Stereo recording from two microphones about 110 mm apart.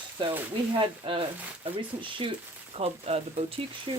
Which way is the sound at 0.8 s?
50° right (ahead or behind).